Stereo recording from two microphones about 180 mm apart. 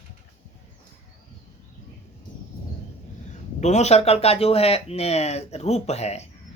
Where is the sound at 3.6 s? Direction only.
40° left (ahead or behind).